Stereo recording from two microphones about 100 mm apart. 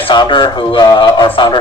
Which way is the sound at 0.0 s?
50° left (ahead or behind).